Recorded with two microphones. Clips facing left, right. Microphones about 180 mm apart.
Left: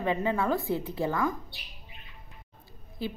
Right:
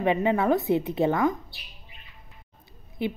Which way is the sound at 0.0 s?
20° right (ahead or behind).